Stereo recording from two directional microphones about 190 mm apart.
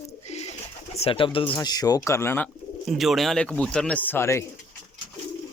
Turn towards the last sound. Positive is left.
turn(degrees=15)  # may be behind; listen again after turning